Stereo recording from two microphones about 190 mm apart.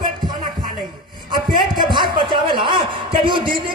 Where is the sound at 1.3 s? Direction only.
25° right (ahead or behind).